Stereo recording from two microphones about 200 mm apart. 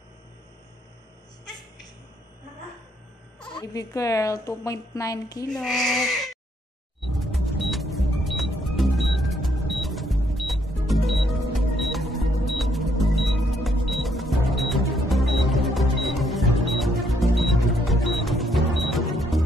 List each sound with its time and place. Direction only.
3.5 s a woman's voice: 15° left (ahead or behind)
5.5 s speech: centre (ahead or behind)
7.0 s music: centre (ahead or behind)